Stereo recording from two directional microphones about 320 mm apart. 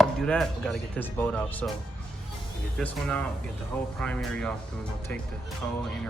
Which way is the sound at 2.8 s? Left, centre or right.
Centre.